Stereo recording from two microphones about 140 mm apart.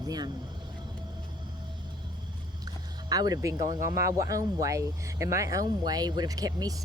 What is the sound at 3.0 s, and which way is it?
Speech, 25° right (ahead or behind).